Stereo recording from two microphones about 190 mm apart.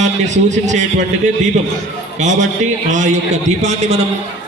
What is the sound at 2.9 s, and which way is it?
Speech, 40° right (ahead or behind).